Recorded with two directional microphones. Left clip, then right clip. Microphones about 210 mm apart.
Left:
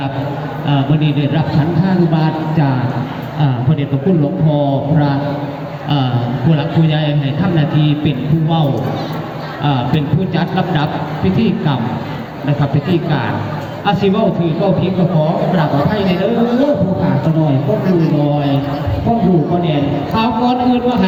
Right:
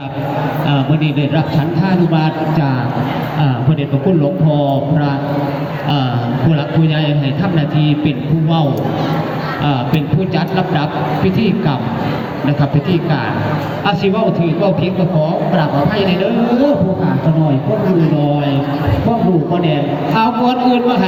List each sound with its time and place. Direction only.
2.1 s speech: 55° right (ahead or behind)
4.5 s speech: 50° right (ahead or behind)
7.5 s speech: 45° right (ahead or behind)
10.3 s speech: 35° right (ahead or behind)
13.8 s speech: 35° right (ahead or behind)
20.1 s speech: 50° right (ahead or behind)